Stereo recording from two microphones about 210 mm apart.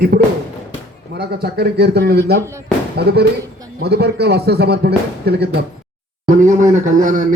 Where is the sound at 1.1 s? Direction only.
50° right (ahead or behind).